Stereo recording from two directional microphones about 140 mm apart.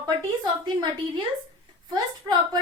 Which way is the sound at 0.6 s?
35° right (ahead or behind).